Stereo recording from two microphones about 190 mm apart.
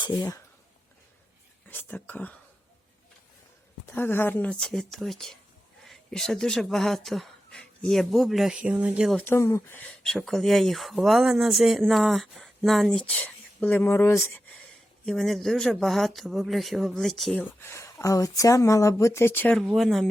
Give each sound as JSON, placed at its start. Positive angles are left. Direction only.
{"t": 0.0, "sound": "speech", "side_deg": 20}
{"t": 1.6, "sound": "speech", "side_deg": 10}
{"t": 3.9, "sound": "speech", "side_deg": 10}
{"t": 9.1, "sound": "speech", "side_deg": 10}
{"t": 17.6, "sound": "speech", "side_deg": 15}